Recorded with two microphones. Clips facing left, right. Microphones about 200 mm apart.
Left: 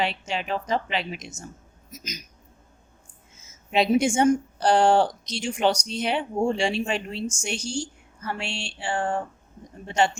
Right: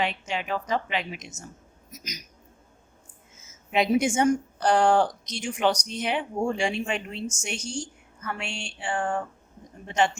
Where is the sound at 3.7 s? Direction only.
30° left (ahead or behind).